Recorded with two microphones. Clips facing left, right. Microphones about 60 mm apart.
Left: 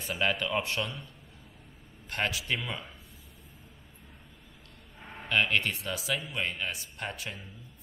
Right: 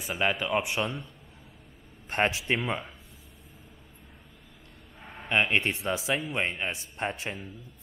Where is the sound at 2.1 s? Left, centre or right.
Right.